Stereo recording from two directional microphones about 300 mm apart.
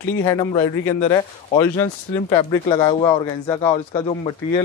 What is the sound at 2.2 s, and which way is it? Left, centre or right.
Speech, centre.